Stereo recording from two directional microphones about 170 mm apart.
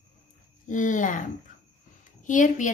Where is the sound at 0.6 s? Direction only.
50° left (ahead or behind).